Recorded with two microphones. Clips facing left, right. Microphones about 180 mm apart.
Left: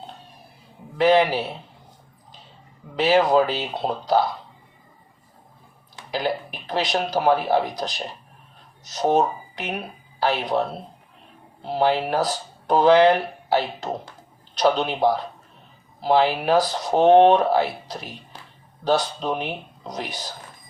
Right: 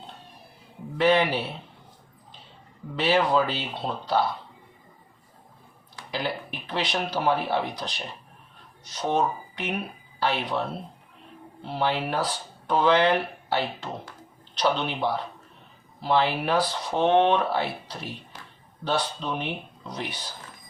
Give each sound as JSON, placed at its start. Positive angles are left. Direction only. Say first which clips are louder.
{"t": 0.9, "sound": "speech", "louder": "left 4 dB", "side_deg": 40}
{"t": 2.9, "sound": "speech", "louder": "left 5 dB", "side_deg": 40}
{"t": 6.2, "sound": "speech", "louder": "left 5 dB", "side_deg": 40}
{"t": 11.6, "sound": "speech", "louder": "left 6 dB", "side_deg": 40}
{"t": 14.6, "sound": "speech", "louder": "left 6 dB", "side_deg": 40}